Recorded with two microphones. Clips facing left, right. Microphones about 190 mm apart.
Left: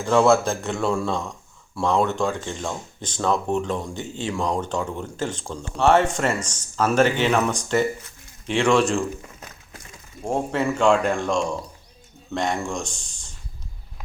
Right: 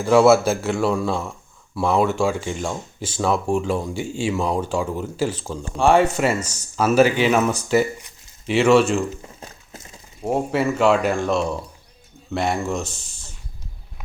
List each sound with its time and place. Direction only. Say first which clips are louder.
0.0 s a man's voice: right 3 dB; 10° right (ahead or behind)
9.2 s a sound: right 3 dB; 30° right (ahead or behind)
10.2 s a man's voice: right 2 dB; 5° right (ahead or behind)